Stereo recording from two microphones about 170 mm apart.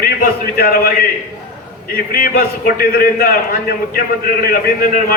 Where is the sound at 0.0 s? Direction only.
60° left (ahead or behind).